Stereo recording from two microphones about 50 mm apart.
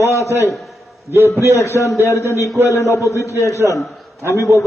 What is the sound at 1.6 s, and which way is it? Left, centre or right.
A man's voice, left.